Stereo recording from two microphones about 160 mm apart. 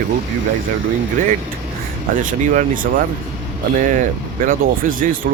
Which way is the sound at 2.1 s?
55° right (ahead or behind).